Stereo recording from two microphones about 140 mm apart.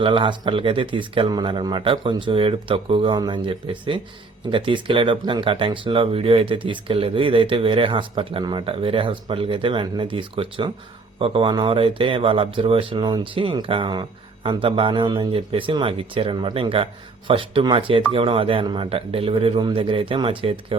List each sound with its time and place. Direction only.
0.0 s speech: 35° right (ahead or behind)